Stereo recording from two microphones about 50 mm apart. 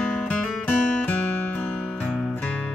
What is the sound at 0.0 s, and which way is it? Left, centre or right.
Music, centre.